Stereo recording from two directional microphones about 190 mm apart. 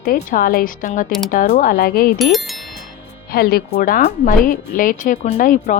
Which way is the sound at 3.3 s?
50° left (ahead or behind).